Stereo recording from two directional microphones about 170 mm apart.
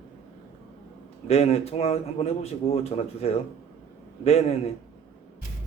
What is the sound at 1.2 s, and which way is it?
Speech, 40° left (ahead or behind).